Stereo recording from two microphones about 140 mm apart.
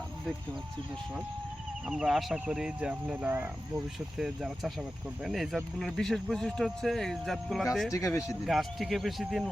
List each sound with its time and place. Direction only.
1.9 s speech: 5° right (ahead or behind)
4.2 s speech: centre (ahead or behind)
7.9 s speech: 25° left (ahead or behind)
8.4 s speech: centre (ahead or behind)